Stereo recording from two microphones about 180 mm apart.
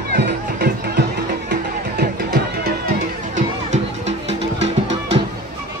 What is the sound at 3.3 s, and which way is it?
Music, 40° right (ahead or behind).